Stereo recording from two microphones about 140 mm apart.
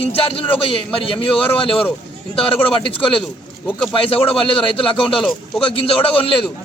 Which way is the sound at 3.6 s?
15° left (ahead or behind).